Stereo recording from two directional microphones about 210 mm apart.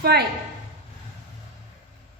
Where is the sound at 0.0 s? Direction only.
50° right (ahead or behind).